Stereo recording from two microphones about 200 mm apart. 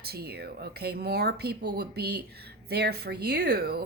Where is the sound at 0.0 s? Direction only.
50° right (ahead or behind).